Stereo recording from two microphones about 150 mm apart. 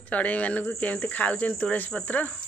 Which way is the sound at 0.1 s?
10° left (ahead or behind).